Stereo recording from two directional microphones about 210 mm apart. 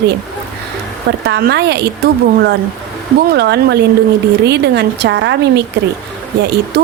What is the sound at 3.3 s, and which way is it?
A woman's voice, 50° right (ahead or behind).